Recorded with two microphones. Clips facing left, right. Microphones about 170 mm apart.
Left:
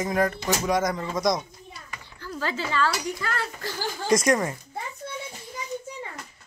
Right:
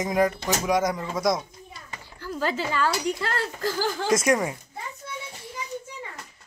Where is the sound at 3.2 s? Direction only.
35° right (ahead or behind).